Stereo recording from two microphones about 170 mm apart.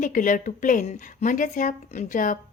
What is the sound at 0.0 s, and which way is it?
A woman's voice, 50° left (ahead or behind).